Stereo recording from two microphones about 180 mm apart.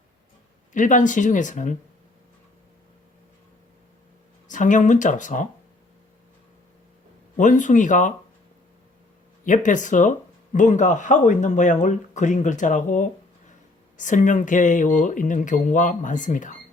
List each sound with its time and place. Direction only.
0.7 s speech: 45° left (ahead or behind)
4.4 s speech: 45° left (ahead or behind)
7.3 s speech: 45° left (ahead or behind)
9.4 s speech: 45° left (ahead or behind)